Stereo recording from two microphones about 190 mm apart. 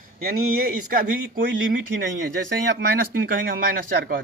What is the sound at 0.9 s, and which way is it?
Speech, 50° right (ahead or behind).